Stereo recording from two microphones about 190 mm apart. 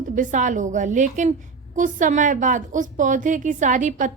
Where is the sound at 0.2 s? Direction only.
40° right (ahead or behind).